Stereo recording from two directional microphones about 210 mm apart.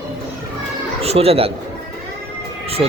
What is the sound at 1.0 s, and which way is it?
Speech, 30° right (ahead or behind).